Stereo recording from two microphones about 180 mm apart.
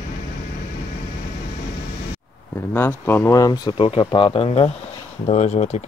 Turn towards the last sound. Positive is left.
turn(degrees=40)  # may be behind; listen again after turning